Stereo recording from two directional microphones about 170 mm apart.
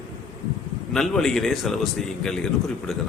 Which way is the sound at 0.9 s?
5° left (ahead or behind).